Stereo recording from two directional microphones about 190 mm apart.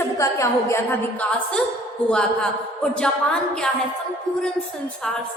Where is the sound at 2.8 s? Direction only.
5° left (ahead or behind).